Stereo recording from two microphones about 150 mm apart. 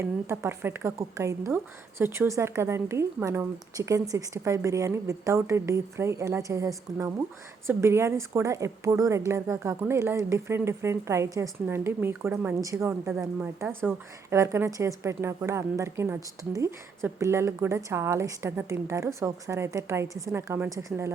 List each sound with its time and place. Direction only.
0.0 s a woman's voice: 15° right (ahead or behind)